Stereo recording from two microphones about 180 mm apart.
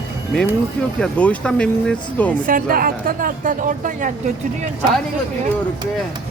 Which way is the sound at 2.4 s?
50° right (ahead or behind).